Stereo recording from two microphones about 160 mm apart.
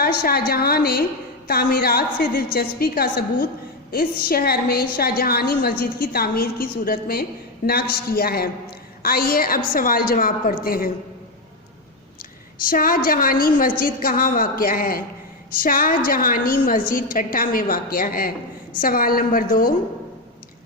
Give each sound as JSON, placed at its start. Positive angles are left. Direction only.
{"t": 0.0, "sound": "a woman's voice", "side_deg": 70}
{"t": 12.5, "sound": "a woman's voice", "side_deg": 65}